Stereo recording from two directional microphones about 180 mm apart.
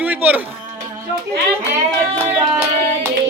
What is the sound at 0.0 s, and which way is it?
Music, 10° right (ahead or behind).